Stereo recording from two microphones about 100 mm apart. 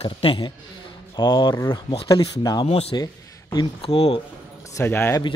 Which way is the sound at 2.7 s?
85° left.